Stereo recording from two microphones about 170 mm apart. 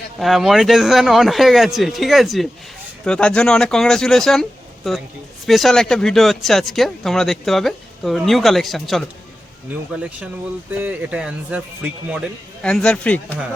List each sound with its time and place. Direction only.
0.2 s speech: centre (ahead or behind)
12.6 s speech: 5° left (ahead or behind)